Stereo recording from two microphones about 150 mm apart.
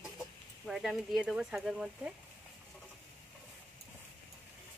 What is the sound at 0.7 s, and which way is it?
Speech, centre (ahead or behind).